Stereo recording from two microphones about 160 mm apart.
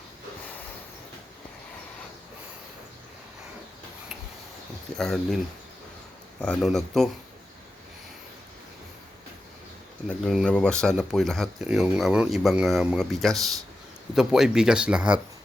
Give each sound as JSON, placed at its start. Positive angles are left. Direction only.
{"t": 4.9, "sound": "speech", "side_deg": 0}
{"t": 6.4, "sound": "speech", "side_deg": 0}
{"t": 10.1, "sound": "speech", "side_deg": 5}